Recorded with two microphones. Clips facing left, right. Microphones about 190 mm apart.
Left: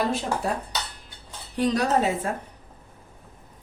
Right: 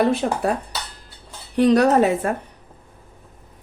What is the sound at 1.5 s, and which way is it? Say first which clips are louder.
Speech: right 8 dB; 65° right (ahead or behind).